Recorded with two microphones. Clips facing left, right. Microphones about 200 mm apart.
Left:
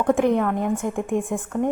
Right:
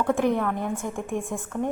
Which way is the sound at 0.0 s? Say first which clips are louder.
Left 4 dB; 15° left (ahead or behind).